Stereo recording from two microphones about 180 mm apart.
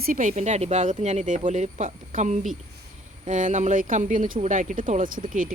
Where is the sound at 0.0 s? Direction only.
50° right (ahead or behind).